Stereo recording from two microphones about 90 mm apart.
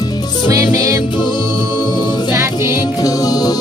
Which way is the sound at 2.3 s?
30° right (ahead or behind).